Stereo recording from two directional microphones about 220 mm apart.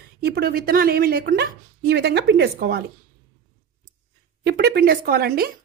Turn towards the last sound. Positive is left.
turn(degrees=-45)  # may be behind; listen again after turning